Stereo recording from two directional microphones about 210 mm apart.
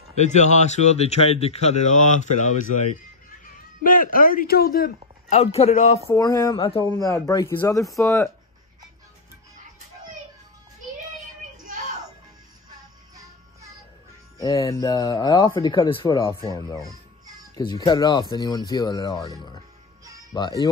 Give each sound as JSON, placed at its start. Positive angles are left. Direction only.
{"t": 0.1, "sound": "speech", "side_deg": 35}
{"t": 5.3, "sound": "speech", "side_deg": 30}
{"t": 6.0, "sound": "speech", "side_deg": 15}
{"t": 6.9, "sound": "speech", "side_deg": 15}
{"t": 11.4, "sound": "a sound", "side_deg": -35}
{"t": 14.4, "sound": "speech", "side_deg": 15}
{"t": 17.8, "sound": "speech", "side_deg": 20}